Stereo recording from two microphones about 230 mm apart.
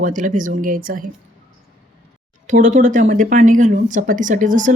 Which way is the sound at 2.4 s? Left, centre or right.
Right.